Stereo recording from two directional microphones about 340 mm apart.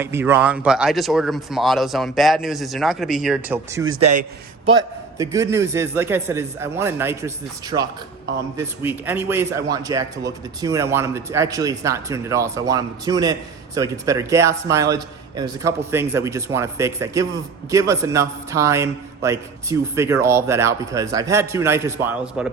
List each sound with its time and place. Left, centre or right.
0.0 s speech: centre
3.8 s a man's voice: right
5.1 s a man's voice: centre